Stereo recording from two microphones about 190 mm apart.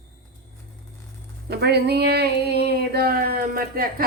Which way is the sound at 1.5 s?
60° right (ahead or behind).